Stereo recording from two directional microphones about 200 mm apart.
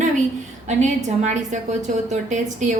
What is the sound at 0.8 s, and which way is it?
A woman's voice, 35° right (ahead or behind).